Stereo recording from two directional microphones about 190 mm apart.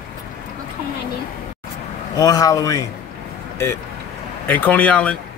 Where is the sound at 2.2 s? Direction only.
20° left (ahead or behind).